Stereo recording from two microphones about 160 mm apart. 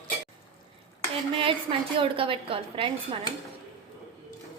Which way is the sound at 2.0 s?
35° right (ahead or behind).